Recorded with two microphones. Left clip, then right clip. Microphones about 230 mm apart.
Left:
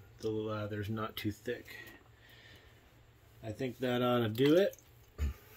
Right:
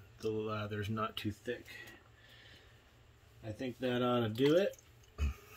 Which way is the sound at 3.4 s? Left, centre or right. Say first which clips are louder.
Left 2 dB; centre.